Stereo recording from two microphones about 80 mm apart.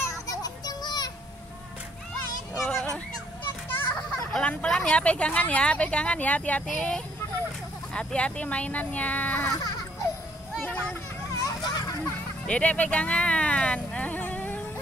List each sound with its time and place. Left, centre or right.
0.0 s children playing: left
2.5 s children playing: centre
3.6 s children playing: left
4.3 s speech: centre
6.6 s speech: centre
11.3 s children playing: left
12.4 s a sound: centre